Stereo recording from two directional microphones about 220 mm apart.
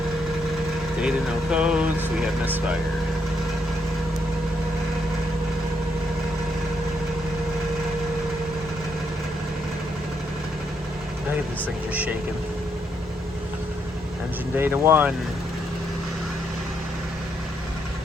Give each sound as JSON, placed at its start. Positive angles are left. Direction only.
{"t": 1.0, "sound": "speech", "side_deg": -5}
{"t": 14.5, "sound": "speech", "side_deg": -10}